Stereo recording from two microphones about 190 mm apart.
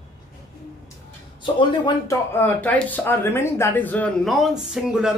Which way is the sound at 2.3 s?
10° left (ahead or behind).